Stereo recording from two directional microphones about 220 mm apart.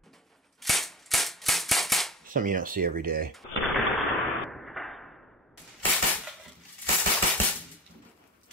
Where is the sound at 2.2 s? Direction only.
40° right (ahead or behind).